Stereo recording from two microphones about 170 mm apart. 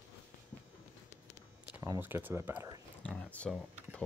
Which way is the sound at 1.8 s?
15° right (ahead or behind).